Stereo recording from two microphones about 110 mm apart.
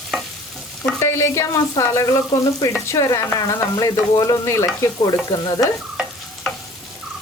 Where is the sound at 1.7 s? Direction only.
25° left (ahead or behind).